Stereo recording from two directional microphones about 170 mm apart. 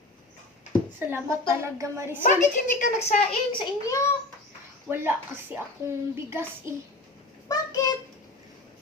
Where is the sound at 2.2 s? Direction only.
45° left (ahead or behind).